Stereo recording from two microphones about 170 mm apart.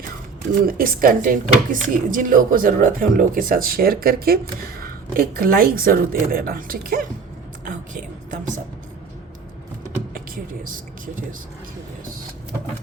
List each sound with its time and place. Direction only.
0.6 s speech: 55° right (ahead or behind)
7.6 s a sound: 50° right (ahead or behind)
10.2 s a woman's voice: 55° right (ahead or behind)